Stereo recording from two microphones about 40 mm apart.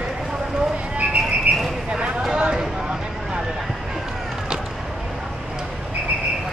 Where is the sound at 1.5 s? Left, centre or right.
Right.